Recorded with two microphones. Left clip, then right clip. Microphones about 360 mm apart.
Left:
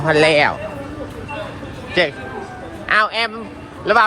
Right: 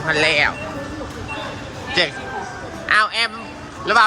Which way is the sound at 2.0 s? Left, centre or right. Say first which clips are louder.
Left 2 dB; centre.